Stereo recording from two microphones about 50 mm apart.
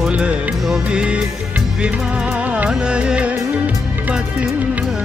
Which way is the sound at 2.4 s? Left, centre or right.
Right.